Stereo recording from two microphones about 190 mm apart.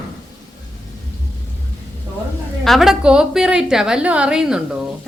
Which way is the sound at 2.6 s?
Centre (ahead or behind).